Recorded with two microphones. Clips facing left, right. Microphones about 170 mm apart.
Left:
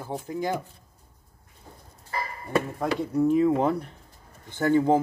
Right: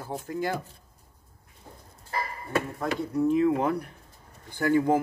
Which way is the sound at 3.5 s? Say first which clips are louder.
Left 2 dB; 30° left (ahead or behind).